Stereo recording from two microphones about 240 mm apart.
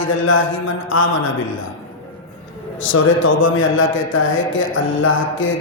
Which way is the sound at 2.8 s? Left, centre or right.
Left.